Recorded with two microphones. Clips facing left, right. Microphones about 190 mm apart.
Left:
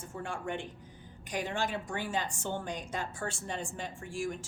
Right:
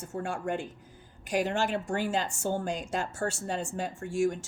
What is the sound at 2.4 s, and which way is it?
Speech, 40° right (ahead or behind).